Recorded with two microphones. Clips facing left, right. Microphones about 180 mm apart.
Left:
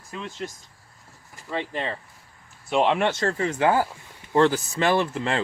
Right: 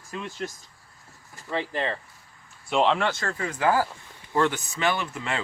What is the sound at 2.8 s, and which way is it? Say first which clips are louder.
Speech: left 3 dB; 20° left (ahead or behind).